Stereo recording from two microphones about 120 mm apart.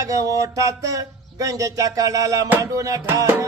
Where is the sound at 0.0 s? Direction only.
30° right (ahead or behind).